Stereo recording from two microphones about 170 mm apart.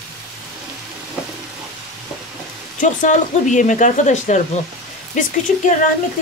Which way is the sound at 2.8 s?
50° left (ahead or behind).